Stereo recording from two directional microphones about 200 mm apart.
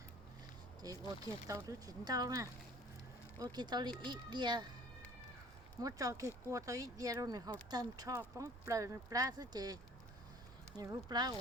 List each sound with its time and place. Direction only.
0.8 s speech: 20° right (ahead or behind)
5.8 s speech: 15° right (ahead or behind)
10.8 s speech: 20° right (ahead or behind)